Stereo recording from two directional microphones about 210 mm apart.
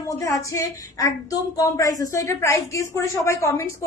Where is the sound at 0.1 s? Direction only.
15° left (ahead or behind).